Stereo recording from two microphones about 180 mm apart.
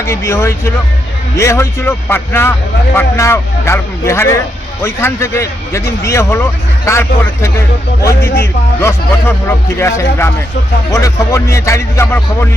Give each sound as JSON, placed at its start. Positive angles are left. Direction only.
{"t": 0.0, "sound": "speech", "side_deg": 15}
{"t": 8.0, "sound": "speech", "side_deg": 15}